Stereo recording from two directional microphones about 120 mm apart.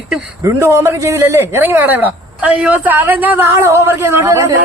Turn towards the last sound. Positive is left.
turn(degrees=-25)  # may be behind; listen again after turning